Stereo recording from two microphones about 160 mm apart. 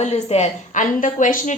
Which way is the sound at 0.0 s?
45° left (ahead or behind).